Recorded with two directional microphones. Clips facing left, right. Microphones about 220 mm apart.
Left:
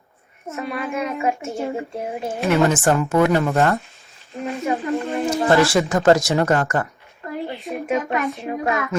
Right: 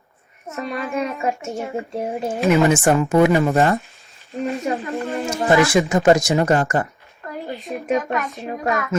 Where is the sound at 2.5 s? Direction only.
15° right (ahead or behind).